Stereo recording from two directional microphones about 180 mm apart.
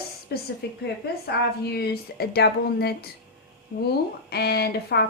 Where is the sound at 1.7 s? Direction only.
65° left (ahead or behind).